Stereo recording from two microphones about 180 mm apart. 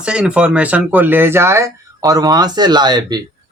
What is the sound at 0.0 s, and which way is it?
Speech, 5° right (ahead or behind).